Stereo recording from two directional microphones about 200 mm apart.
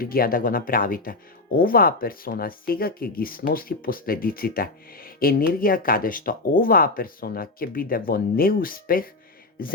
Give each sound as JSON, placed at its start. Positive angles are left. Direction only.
{"t": 0.0, "sound": "speech", "side_deg": 45}